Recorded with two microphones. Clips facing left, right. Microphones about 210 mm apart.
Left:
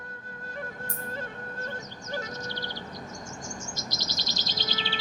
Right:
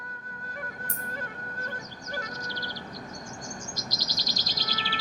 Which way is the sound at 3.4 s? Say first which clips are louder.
Even; 25° left (ahead or behind).